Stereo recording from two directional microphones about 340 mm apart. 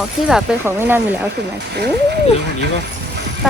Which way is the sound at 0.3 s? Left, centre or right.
Centre.